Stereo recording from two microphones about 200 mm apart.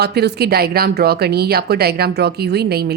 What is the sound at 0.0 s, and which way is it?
A woman's voice, 55° right (ahead or behind).